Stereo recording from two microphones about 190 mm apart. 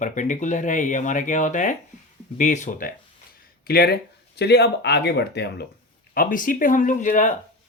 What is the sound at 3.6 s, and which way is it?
Speech, 55° left (ahead or behind).